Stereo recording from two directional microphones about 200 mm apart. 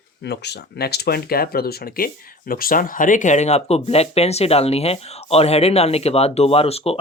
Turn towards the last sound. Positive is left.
turn(degrees=30)  # may be behind; listen again after turning